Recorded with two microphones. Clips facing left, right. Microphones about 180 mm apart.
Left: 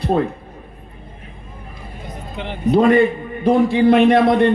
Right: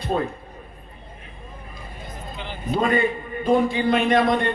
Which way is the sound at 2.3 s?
65° left (ahead or behind).